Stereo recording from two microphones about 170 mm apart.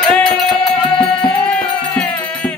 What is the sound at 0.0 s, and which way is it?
Music, 5° left (ahead or behind).